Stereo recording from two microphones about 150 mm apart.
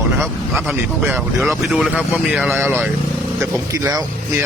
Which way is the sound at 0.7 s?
10° right (ahead or behind).